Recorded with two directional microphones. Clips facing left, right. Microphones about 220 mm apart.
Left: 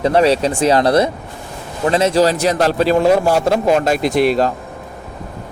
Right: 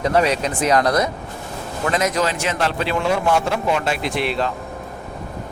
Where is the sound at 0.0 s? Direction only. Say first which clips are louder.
Left 5 dB; 30° left (ahead or behind).